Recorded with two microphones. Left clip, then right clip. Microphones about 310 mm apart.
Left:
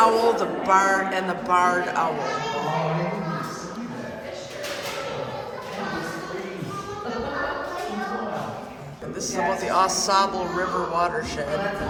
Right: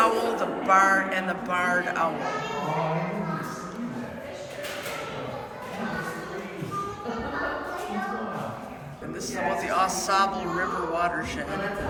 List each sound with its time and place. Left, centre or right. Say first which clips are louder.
0.0 s music: left 5 dB; centre
9.2 s a woman's voice: left 3 dB; centre